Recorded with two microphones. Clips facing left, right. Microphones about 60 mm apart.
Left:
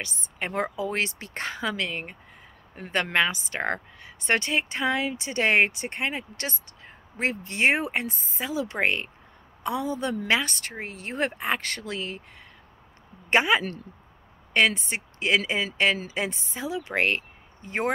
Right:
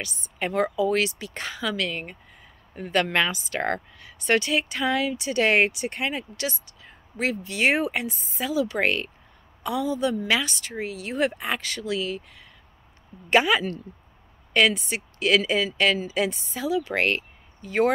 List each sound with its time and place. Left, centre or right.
0.0 s a woman's voice: left
13.3 s speech: left